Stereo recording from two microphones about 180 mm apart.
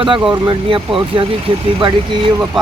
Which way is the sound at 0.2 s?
10° right (ahead or behind).